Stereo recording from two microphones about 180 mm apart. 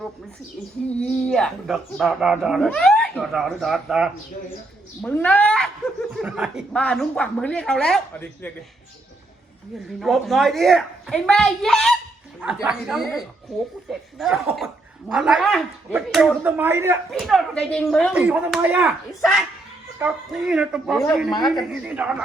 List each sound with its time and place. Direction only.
0.9 s speech: 5° left (ahead or behind)
5.0 s speech: 10° left (ahead or behind)
10.0 s speech: centre (ahead or behind)
17.1 s speech: centre (ahead or behind)
18.1 s speech: 5° right (ahead or behind)